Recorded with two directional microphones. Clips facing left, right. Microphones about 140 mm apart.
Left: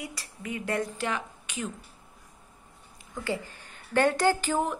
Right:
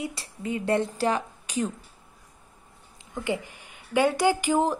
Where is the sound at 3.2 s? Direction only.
15° right (ahead or behind).